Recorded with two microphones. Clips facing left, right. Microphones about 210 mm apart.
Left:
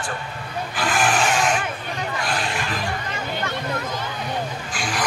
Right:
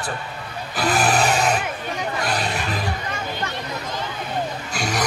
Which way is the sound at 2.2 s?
40° right (ahead or behind).